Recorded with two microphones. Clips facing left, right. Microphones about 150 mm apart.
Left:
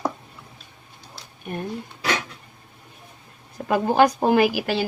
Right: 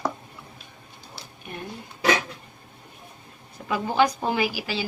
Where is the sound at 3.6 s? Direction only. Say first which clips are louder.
Left 4 dB; 50° left (ahead or behind).